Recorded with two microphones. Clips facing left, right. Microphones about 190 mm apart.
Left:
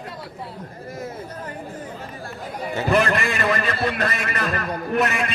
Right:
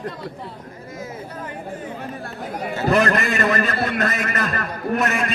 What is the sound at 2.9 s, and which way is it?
A man's voice, 40° right (ahead or behind).